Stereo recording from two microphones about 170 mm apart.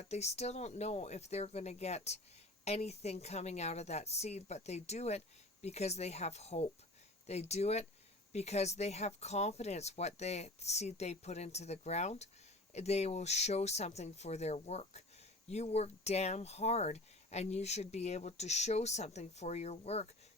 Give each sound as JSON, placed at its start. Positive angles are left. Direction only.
{"t": 0.0, "sound": "speech", "side_deg": 40}